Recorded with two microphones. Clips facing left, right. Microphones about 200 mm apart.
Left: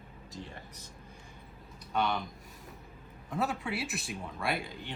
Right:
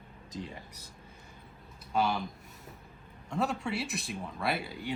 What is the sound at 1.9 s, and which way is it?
Speech, 5° right (ahead or behind).